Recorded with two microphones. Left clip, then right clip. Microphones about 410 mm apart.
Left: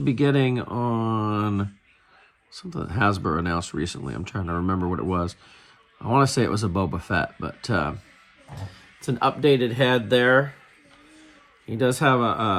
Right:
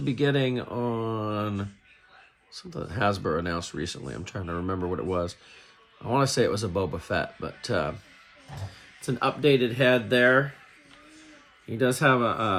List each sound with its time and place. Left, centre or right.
0.0 s speech: centre
9.0 s speech: centre
11.7 s speech: centre